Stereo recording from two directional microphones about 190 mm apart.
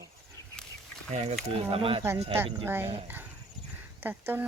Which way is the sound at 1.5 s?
30° right (ahead or behind).